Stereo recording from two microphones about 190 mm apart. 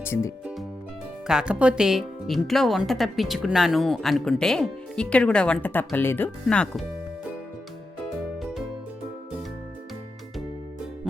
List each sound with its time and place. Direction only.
0.0 s speech: 15° left (ahead or behind)
1.3 s a woman's voice: 5° right (ahead or behind)